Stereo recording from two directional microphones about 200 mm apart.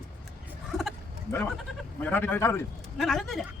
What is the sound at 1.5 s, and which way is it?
Speech, 10° left (ahead or behind).